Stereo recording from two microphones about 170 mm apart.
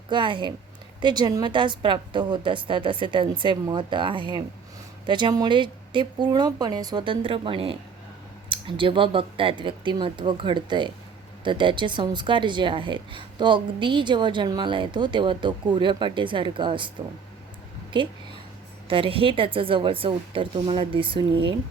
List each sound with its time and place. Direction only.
0.1 s a woman's voice: 30° right (ahead or behind)
18.9 s a woman's voice: 30° right (ahead or behind)